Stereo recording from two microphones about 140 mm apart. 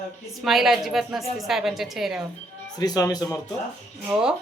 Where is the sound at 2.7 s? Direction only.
30° left (ahead or behind).